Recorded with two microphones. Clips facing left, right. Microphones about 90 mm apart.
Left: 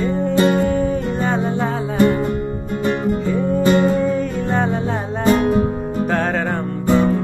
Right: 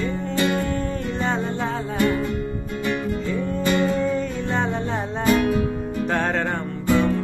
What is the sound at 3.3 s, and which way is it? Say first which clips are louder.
Music: left 6 dB; 15° left (ahead or behind).